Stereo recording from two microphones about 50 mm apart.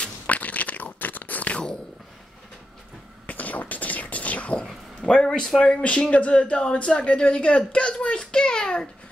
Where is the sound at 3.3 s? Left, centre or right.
Left; by 5.5 s centre.